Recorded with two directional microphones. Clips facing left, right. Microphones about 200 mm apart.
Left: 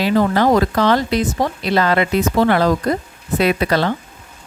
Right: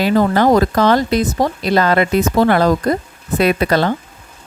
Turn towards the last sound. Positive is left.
turn(degrees=-45)  # may be behind; listen again after turning